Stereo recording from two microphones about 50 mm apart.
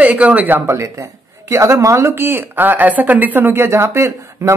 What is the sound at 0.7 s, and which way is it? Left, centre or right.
Speech, right.